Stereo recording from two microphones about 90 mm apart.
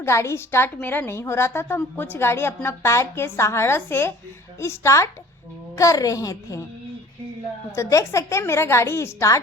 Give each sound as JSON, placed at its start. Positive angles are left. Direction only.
{"t": 0.0, "sound": "a woman's voice", "side_deg": 30}
{"t": 7.8, "sound": "a woman's voice", "side_deg": 35}